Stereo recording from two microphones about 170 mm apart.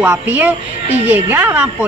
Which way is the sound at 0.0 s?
10° right (ahead or behind).